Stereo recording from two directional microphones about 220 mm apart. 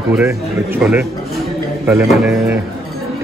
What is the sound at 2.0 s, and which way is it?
Speech, centre (ahead or behind).